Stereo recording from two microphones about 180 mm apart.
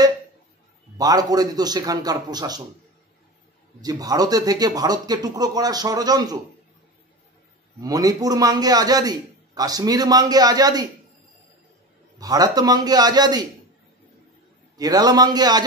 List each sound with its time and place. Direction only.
0.9 s a man's voice: 20° right (ahead or behind)
3.8 s a man's voice: 20° right (ahead or behind)
7.8 s a man's voice: 20° right (ahead or behind)
12.2 s a man's voice: 20° right (ahead or behind)
14.8 s a man's voice: 20° right (ahead or behind)